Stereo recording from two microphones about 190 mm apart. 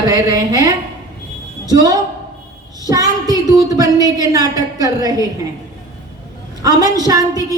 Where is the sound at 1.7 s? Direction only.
20° right (ahead or behind).